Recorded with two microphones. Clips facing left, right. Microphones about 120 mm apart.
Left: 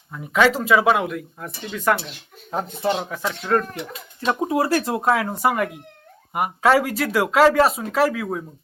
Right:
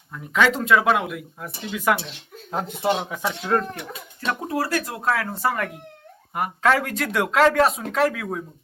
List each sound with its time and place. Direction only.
0.1 s speech: 5° left (ahead or behind)
4.3 s speech: 20° left (ahead or behind); by 8.4 s 5° left (ahead or behind)